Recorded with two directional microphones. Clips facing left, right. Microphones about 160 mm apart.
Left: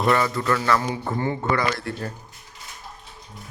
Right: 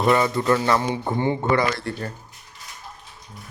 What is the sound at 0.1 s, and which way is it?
A man's voice, 20° right (ahead or behind).